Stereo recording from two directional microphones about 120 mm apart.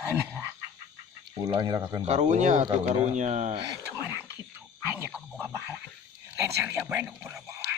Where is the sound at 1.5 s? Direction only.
35° right (ahead or behind).